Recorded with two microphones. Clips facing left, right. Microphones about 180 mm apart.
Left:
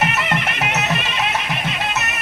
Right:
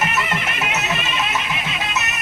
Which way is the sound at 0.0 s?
65° left (ahead or behind).